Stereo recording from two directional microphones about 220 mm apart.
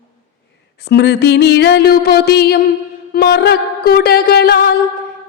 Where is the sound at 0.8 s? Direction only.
50° left (ahead or behind).